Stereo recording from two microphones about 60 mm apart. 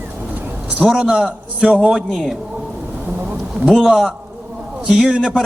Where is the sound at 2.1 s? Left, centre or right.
Centre.